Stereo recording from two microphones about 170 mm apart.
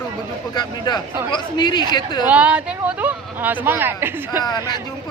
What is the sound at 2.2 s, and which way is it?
Speech, 10° right (ahead or behind).